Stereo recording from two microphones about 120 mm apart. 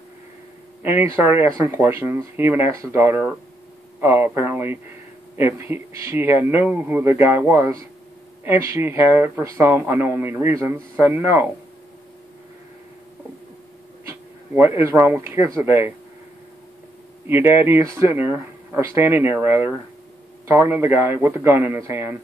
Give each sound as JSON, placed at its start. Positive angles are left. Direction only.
{"t": 0.8, "sound": "speech", "side_deg": -15}
{"t": 14.0, "sound": "speech", "side_deg": -20}
{"t": 17.3, "sound": "speech", "side_deg": -20}